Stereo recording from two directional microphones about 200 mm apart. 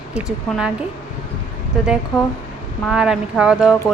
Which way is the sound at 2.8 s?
5° right (ahead or behind).